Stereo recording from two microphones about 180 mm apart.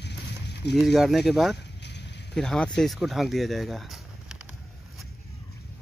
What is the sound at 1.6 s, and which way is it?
Vehicle, 70° left (ahead or behind).